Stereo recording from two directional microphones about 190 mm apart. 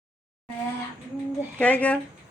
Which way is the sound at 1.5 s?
10° left (ahead or behind).